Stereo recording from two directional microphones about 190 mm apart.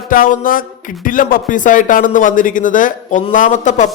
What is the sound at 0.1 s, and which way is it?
Speech, 45° left (ahead or behind).